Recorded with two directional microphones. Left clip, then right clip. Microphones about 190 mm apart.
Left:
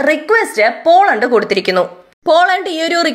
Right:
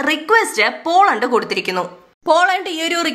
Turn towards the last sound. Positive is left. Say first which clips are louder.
# left 5 dB
turn(degrees=10)  # may be behind; listen again after turning